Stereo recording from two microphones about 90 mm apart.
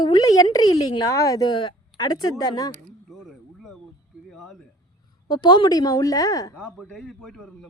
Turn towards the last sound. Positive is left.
turn(degrees=5)  # may be behind; listen again after turning